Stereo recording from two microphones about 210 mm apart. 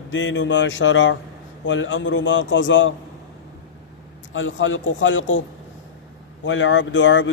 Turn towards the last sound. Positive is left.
turn(degrees=60)  # may be behind; listen again after turning